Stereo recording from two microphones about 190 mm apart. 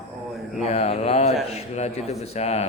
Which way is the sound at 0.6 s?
35° left (ahead or behind).